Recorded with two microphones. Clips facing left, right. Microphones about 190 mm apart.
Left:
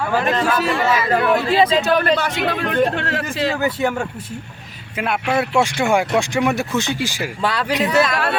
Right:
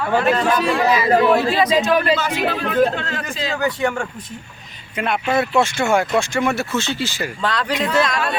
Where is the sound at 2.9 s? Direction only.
70° left (ahead or behind).